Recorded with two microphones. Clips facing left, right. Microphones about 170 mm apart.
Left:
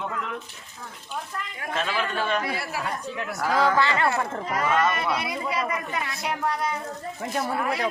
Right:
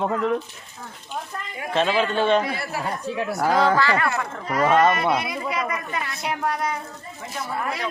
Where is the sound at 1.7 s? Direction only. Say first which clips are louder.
Right 7 dB; 30° right (ahead or behind).